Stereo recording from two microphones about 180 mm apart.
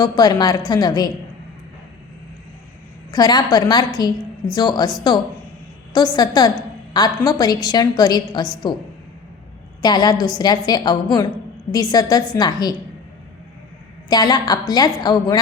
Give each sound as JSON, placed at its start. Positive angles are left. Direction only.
{"t": 0.0, "sound": "a woman's voice", "side_deg": 20}
{"t": 3.1, "sound": "a woman's voice", "side_deg": 20}
{"t": 9.8, "sound": "a woman's voice", "side_deg": 20}
{"t": 14.1, "sound": "a woman's voice", "side_deg": 20}